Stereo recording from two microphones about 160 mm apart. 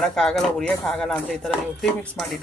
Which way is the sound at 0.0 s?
5° left (ahead or behind).